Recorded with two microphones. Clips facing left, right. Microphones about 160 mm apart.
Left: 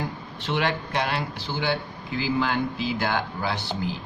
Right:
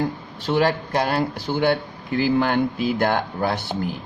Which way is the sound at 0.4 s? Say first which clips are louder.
Right 6 dB; 40° right (ahead or behind).